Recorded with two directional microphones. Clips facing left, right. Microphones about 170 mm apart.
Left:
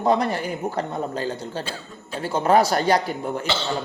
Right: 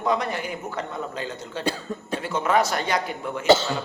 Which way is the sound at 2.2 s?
35° left (ahead or behind).